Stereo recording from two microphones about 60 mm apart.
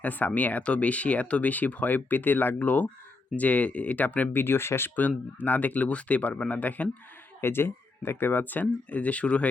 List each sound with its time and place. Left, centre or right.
0.0 s speech: left
4.9 s speech: left
7.4 s speech: left